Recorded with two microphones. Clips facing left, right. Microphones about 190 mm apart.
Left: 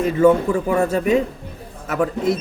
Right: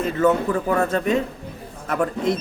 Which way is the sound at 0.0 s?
10° left (ahead or behind).